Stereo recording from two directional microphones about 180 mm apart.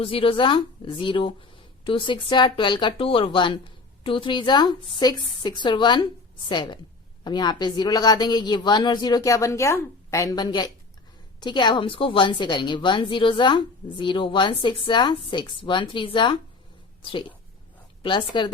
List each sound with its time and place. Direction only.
0.0 s speech: 30° left (ahead or behind)